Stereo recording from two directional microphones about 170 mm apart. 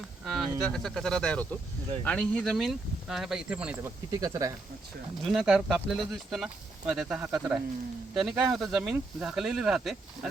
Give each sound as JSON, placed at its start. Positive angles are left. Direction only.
{"t": 0.3, "sound": "a sound", "side_deg": 0}
{"t": 0.6, "sound": "speech", "side_deg": 0}
{"t": 4.1, "sound": "speech", "side_deg": -20}
{"t": 5.2, "sound": "speech", "side_deg": 0}